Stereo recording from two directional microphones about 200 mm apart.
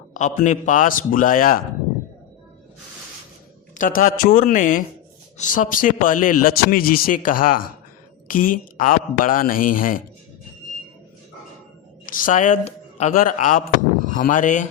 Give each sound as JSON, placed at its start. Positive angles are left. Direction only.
{"t": 0.1, "sound": "a man's voice", "side_deg": 40}
{"t": 3.8, "sound": "a man's voice", "side_deg": 45}
{"t": 12.0, "sound": "a man's voice", "side_deg": 40}